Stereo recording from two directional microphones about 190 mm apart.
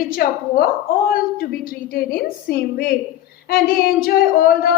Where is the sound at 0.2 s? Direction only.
55° left (ahead or behind).